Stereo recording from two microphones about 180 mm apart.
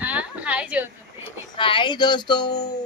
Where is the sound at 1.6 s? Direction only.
25° left (ahead or behind).